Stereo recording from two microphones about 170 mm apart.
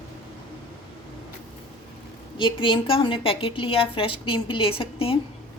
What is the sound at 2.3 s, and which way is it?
A woman's voice, 30° left (ahead or behind).